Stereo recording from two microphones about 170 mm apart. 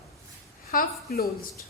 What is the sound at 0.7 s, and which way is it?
Speech, 60° left (ahead or behind).